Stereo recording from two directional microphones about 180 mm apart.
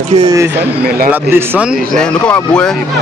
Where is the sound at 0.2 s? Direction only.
20° right (ahead or behind).